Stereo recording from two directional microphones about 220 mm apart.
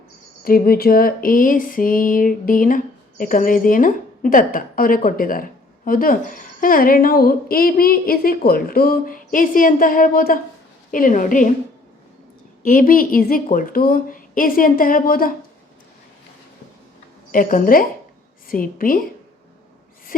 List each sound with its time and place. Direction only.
0.4 s speech: 40° left (ahead or behind)
12.6 s speech: 40° left (ahead or behind)
17.3 s speech: 40° left (ahead or behind)